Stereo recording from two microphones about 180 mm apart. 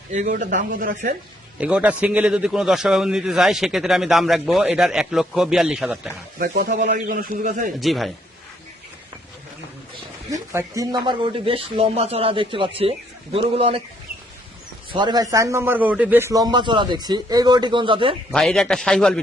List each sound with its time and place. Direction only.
0.1 s speech: 45° right (ahead or behind)
1.5 s a man's voice: 5° right (ahead or behind)
6.4 s speech: 55° right (ahead or behind)
7.8 s a man's voice: centre (ahead or behind)
10.2 s a man's voice: 15° right (ahead or behind); by 13.8 s 30° right (ahead or behind)
14.9 s a man's voice: 25° right (ahead or behind)
18.3 s a man's voice: 5° left (ahead or behind)